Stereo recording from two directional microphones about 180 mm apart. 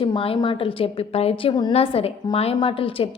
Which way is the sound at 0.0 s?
30° left (ahead or behind).